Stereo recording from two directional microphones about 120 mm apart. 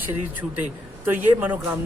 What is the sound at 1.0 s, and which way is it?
Speech, 15° right (ahead or behind).